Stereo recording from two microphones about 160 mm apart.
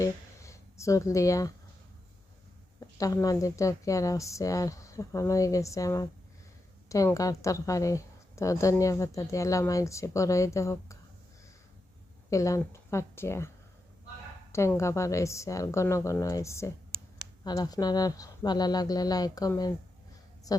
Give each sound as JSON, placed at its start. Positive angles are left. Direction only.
{"t": 0.0, "sound": "speech", "side_deg": 20}
{"t": 2.8, "sound": "a woman's voice", "side_deg": 20}
{"t": 12.3, "sound": "a woman's voice", "side_deg": 20}
{"t": 14.8, "sound": "a woman's voice", "side_deg": 20}